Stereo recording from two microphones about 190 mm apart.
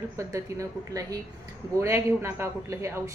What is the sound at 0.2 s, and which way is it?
A woman's voice, 15° right (ahead or behind).